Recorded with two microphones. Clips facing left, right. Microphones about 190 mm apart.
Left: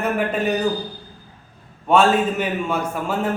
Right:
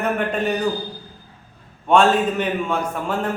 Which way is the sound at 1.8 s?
5° left (ahead or behind).